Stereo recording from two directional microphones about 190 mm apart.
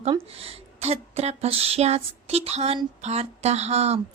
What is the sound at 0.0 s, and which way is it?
Speech, 30° right (ahead or behind).